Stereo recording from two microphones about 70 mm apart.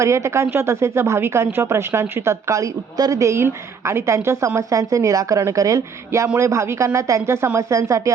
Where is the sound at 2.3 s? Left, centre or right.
Right.